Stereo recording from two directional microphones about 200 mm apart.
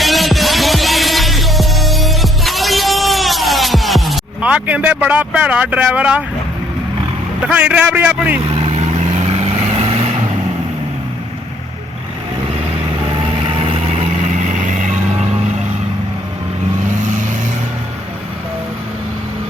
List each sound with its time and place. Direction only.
0.0 s music: centre (ahead or behind)
7.4 s a man's voice: 5° right (ahead or behind)
8.4 s vehicle: 30° right (ahead or behind)
13.6 s vehicle: 30° right (ahead or behind)